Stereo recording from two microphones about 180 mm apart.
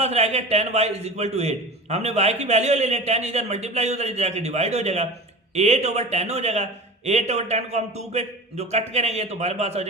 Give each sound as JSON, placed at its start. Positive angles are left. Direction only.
{"t": 0.0, "sound": "a man's voice", "side_deg": -40}